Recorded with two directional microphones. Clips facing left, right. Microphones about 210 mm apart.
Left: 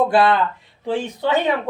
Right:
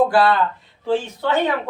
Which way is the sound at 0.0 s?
20° left (ahead or behind).